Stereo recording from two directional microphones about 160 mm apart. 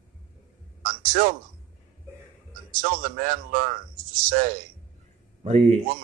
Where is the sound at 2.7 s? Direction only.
60° right (ahead or behind).